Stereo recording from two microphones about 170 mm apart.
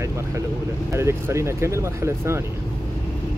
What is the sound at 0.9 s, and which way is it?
Speech, 15° right (ahead or behind).